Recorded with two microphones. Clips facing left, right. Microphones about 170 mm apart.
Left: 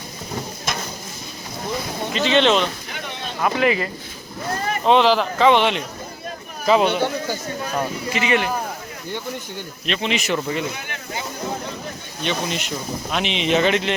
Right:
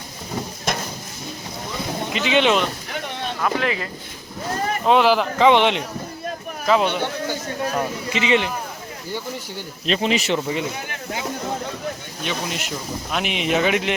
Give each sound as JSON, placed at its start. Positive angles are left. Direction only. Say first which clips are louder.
{"t": 2.1, "sound": "speech", "louder": "left 1 dB", "side_deg": -10}
{"t": 3.4, "sound": "speech", "louder": "left 4 dB", "side_deg": 5}
{"t": 4.9, "sound": "speech", "louder": "left 1 dB", "side_deg": -10}
{"t": 6.7, "sound": "speech", "louder": "left 2 dB", "side_deg": 10}
{"t": 8.1, "sound": "speech", "louder": "right 1 dB", "side_deg": -20}
{"t": 9.8, "sound": "speech", "louder": "right 3 dB", "side_deg": -35}
{"t": 10.2, "sound": "speech", "louder": "even", "side_deg": -20}
{"t": 12.2, "sound": "speech", "louder": "left 3 dB", "side_deg": -5}